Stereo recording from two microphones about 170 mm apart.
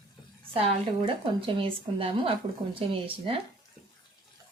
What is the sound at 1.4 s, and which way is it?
A woman's voice, 30° right (ahead or behind).